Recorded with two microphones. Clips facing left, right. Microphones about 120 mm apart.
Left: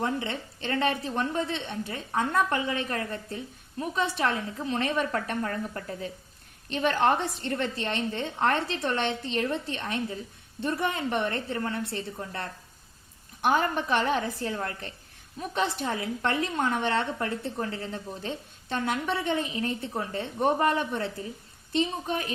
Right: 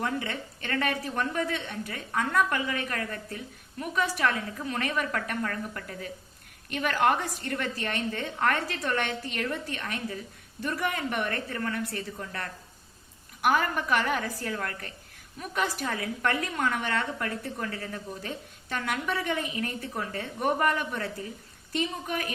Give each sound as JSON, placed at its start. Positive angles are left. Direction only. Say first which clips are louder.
{"t": 0.0, "sound": "a woman's voice", "louder": "left 1 dB", "side_deg": 25}